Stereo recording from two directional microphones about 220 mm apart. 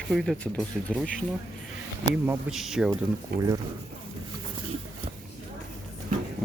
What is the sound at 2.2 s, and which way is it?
Speech, centre (ahead or behind).